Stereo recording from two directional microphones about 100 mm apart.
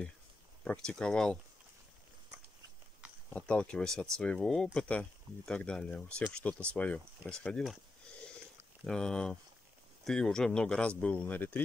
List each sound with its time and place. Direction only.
0.7 s speech: 10° left (ahead or behind)
3.3 s speech: 10° left (ahead or behind)
8.8 s speech: 5° left (ahead or behind)